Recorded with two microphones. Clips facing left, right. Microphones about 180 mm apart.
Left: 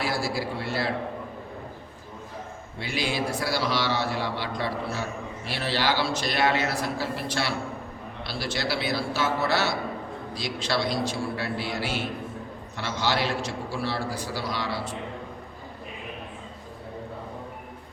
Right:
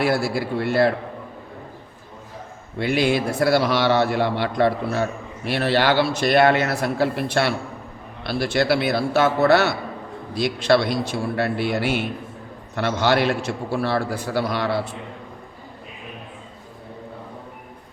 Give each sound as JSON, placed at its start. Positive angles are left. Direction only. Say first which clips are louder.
{"t": 0.0, "sound": "a man's voice", "louder": "right 7 dB", "side_deg": -60}
{"t": 2.7, "sound": "a man's voice", "louder": "right 9 dB", "side_deg": -60}